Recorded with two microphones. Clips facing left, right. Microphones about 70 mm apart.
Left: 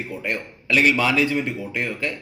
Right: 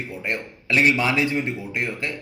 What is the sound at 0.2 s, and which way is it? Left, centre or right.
A man's voice, right.